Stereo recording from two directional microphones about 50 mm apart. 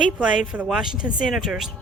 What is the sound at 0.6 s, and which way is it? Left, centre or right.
Speech, centre.